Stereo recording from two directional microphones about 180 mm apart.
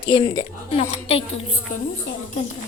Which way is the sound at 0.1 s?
25° left (ahead or behind).